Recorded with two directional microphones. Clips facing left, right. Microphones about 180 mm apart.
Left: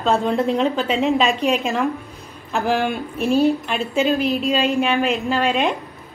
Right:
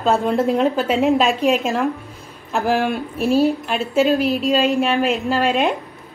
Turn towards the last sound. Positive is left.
turn(degrees=0)  # may be behind; listen again after turning